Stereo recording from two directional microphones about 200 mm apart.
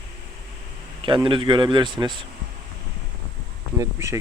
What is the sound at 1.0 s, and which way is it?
Speech, 25° right (ahead or behind).